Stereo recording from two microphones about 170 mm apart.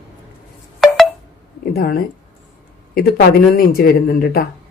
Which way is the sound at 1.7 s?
60° left (ahead or behind).